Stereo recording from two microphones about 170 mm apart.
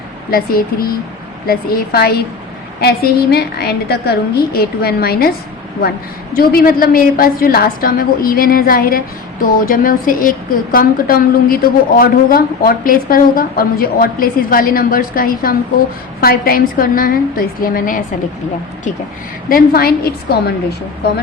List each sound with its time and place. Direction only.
0.3 s a woman's voice: 60° left (ahead or behind)
6.3 s a woman's voice: 60° left (ahead or behind)
19.5 s a woman's voice: 60° left (ahead or behind)